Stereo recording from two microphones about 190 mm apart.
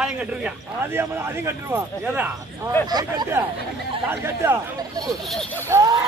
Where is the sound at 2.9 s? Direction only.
20° right (ahead or behind).